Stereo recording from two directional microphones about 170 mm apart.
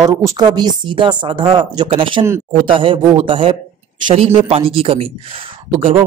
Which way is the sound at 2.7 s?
30° right (ahead or behind).